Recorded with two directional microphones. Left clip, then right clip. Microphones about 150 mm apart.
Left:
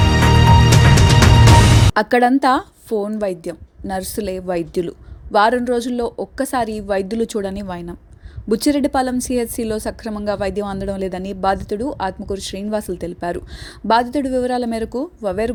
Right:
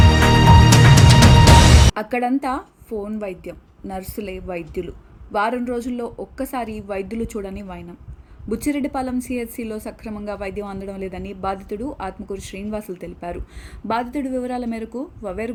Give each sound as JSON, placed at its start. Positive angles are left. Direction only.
{"t": 0.0, "sound": "music", "side_deg": 0}
{"t": 2.0, "sound": "a woman's voice", "side_deg": 60}